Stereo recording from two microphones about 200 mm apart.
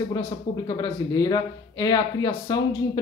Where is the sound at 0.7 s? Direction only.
20° left (ahead or behind).